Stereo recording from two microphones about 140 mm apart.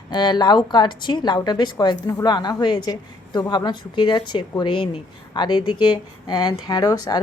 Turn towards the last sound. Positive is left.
turn(degrees=30)  # may be behind; listen again after turning